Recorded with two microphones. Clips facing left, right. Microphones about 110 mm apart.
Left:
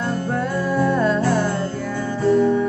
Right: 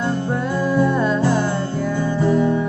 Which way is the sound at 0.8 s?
5° right (ahead or behind).